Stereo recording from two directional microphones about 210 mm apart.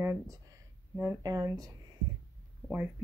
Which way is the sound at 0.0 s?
10° right (ahead or behind).